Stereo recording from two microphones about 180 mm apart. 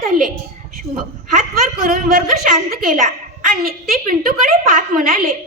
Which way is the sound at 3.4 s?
50° right (ahead or behind).